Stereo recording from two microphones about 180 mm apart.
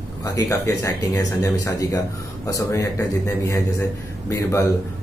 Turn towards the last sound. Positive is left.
turn(degrees=15)  # may be behind; listen again after turning